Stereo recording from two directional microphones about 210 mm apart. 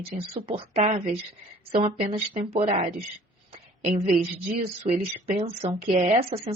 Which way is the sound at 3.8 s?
30° right (ahead or behind).